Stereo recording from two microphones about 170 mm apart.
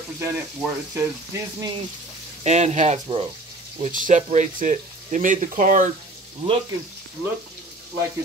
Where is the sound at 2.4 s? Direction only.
40° right (ahead or behind).